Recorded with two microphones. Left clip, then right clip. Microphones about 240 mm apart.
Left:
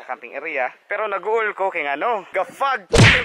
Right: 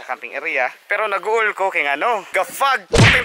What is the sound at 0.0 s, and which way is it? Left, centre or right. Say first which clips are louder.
Speech: right 4 dB; centre.